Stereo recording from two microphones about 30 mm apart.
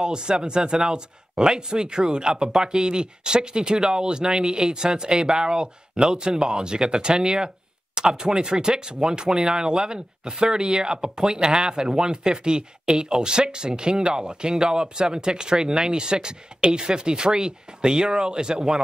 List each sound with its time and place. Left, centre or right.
0.0 s speech: right
0.9 s speech: right